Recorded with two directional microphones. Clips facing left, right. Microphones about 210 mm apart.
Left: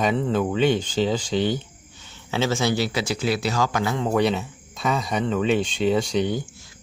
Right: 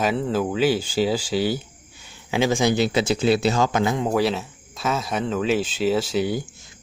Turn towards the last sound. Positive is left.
turn(degrees=-5)  # may be behind; listen again after turning